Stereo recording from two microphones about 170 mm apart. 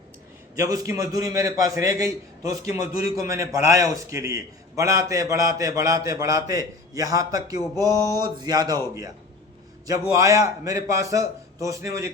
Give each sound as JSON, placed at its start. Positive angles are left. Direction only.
{"t": 0.5, "sound": "a man's voice", "side_deg": -20}
{"t": 10.1, "sound": "a man's voice", "side_deg": -20}